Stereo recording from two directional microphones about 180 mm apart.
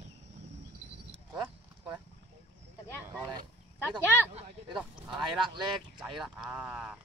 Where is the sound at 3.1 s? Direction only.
15° right (ahead or behind).